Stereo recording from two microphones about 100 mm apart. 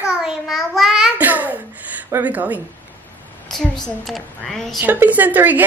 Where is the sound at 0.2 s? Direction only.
Centre (ahead or behind).